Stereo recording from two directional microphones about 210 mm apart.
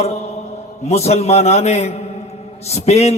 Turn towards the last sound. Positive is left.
turn(degrees=30)  # may be behind; listen again after turning